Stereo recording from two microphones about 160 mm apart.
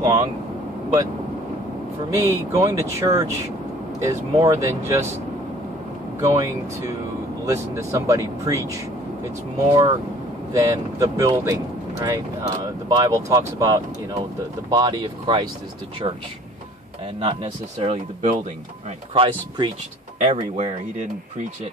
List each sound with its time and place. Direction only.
0.0 s vehicle: 25° right (ahead or behind)
2.1 s speech: 20° right (ahead or behind)
6.2 s speech: 20° right (ahead or behind)
10.5 s speech: 20° right (ahead or behind)
17.2 s speech: 40° right (ahead or behind)
19.1 s speech: 30° right (ahead or behind)
20.2 s speech: 45° right (ahead or behind)